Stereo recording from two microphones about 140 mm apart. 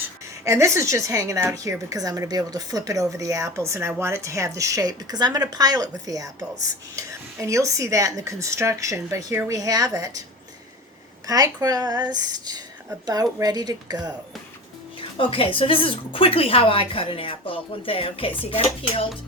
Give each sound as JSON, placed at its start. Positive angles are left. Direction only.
{"t": 0.4, "sound": "a woman's voice", "side_deg": -20}
{"t": 11.3, "sound": "a woman's voice", "side_deg": -25}
{"t": 14.9, "sound": "a woman's voice", "side_deg": 40}